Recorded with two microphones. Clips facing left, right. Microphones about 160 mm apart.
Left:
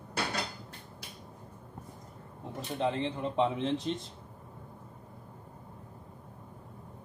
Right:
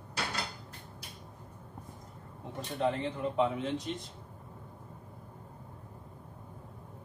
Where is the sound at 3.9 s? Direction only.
30° left (ahead or behind).